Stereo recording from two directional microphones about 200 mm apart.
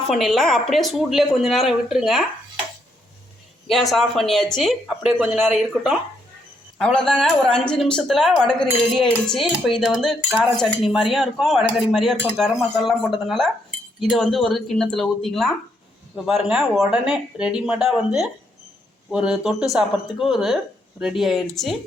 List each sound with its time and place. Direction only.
0.1 s speech: centre (ahead or behind)
3.7 s speech: centre (ahead or behind)